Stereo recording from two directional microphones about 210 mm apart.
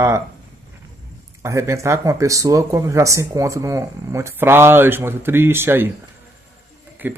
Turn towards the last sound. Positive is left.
turn(degrees=-10)  # may be behind; listen again after turning